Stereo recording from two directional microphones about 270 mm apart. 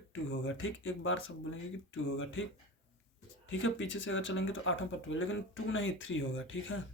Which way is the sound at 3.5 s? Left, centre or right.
Left.